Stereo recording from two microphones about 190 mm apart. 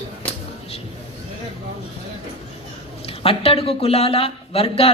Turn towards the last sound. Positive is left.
turn(degrees=30)  # may be behind; listen again after turning